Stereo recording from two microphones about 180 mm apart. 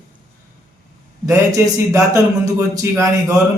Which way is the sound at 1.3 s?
15° right (ahead or behind).